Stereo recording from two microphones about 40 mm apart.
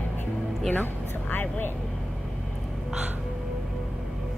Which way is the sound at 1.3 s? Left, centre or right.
Left.